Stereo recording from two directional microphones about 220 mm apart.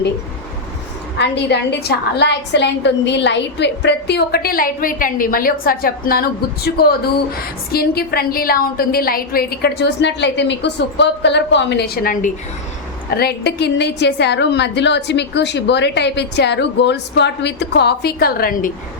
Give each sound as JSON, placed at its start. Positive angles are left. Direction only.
{"t": 1.2, "sound": "a woman's voice", "side_deg": 50}
{"t": 13.1, "sound": "a woman's voice", "side_deg": 45}